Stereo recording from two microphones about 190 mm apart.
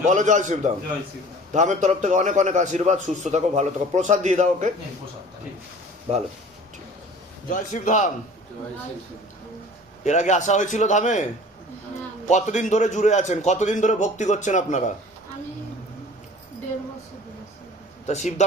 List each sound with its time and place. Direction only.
0.0 s a man's voice: 40° right (ahead or behind)
7.5 s a man's voice: 40° left (ahead or behind)
10.0 s a man's voice: 40° left (ahead or behind)
12.3 s a man's voice: 40° left (ahead or behind)
18.0 s a man's voice: 35° left (ahead or behind)